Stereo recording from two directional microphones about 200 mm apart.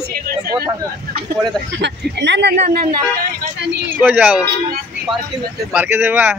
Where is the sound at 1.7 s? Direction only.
60° right (ahead or behind).